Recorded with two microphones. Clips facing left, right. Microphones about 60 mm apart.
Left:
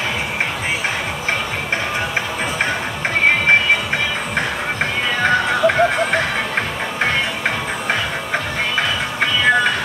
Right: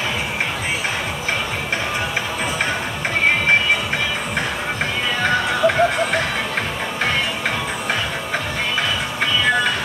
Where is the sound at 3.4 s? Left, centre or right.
Left.